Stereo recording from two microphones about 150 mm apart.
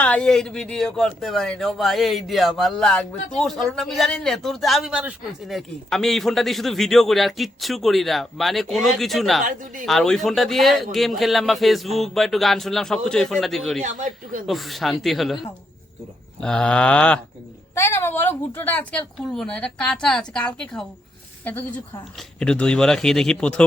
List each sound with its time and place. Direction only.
0.0 s speech: 10° left (ahead or behind)
13.8 s speech: 55° right (ahead or behind)
14.4 s speech: centre (ahead or behind)
16.4 s a woman's voice: 5° left (ahead or behind)
22.4 s speech: 5° left (ahead or behind)